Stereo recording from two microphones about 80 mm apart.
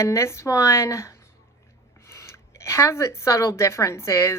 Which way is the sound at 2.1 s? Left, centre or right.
Left.